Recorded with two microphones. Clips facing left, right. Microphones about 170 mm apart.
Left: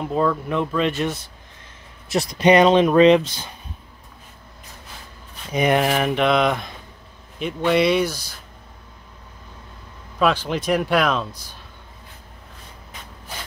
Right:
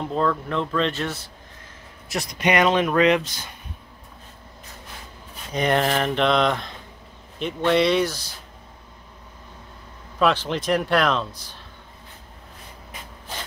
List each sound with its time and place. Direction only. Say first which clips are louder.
0.0 s speech: left 2 dB; 10° left (ahead or behind)
2.0 s speech: left 7 dB; 30° left (ahead or behind)
5.5 s speech: left 2 dB; 10° left (ahead or behind)
10.1 s speech: left 1 dB; 5° left (ahead or behind)